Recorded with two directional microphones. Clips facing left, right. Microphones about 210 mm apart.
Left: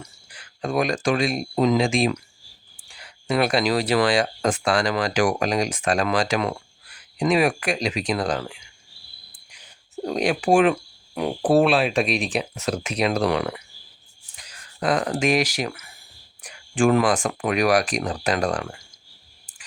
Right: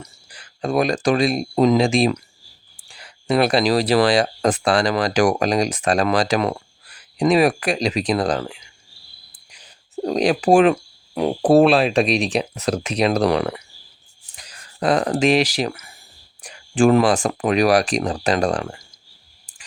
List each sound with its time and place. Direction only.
0.0 s speech: 35° right (ahead or behind)
3.2 s speech: 35° right (ahead or behind)
10.0 s speech: 35° right (ahead or behind)
14.8 s speech: 35° right (ahead or behind)